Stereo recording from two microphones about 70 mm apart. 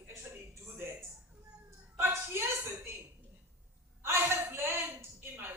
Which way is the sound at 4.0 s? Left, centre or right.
Right.